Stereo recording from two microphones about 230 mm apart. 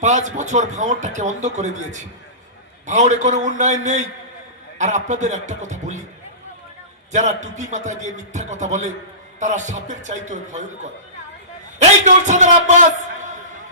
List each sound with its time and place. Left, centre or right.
0.0 s speech: right
7.1 s speech: right
11.8 s a man's voice: right